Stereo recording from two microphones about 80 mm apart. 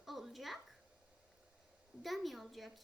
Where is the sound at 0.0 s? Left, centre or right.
Centre.